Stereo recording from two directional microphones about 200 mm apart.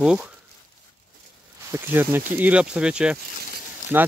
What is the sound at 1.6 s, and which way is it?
Speech, 10° right (ahead or behind).